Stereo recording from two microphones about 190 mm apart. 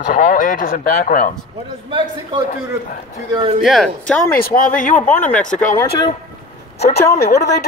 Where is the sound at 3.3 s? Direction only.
25° right (ahead or behind).